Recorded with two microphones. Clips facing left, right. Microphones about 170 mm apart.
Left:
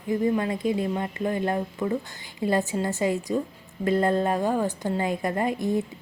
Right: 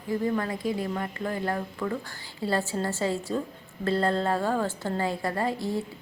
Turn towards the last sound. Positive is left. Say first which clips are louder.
# left 3 dB
turn(degrees=20)  # may be behind; listen again after turning